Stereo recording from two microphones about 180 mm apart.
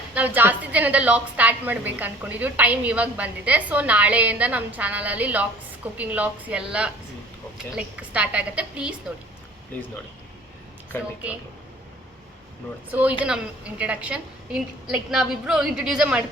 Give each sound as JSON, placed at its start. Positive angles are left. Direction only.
{"t": 0.1, "sound": "a woman's voice", "side_deg": -10}
{"t": 12.9, "sound": "a woman's voice", "side_deg": -10}